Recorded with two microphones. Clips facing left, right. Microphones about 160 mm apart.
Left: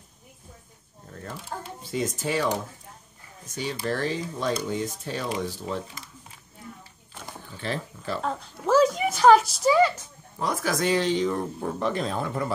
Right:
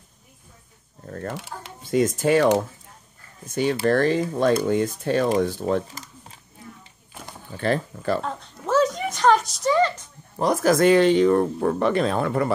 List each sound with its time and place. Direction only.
1.0 s speech: 60° right (ahead or behind)
7.5 s speech: 55° right (ahead or behind)
8.2 s a woman's voice: centre (ahead or behind)
10.4 s speech: 45° right (ahead or behind); by 12.4 s 70° right (ahead or behind)